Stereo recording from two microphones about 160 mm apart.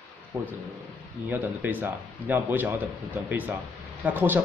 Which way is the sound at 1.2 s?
10° right (ahead or behind).